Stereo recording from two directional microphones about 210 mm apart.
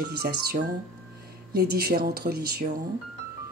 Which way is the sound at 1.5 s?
50° right (ahead or behind).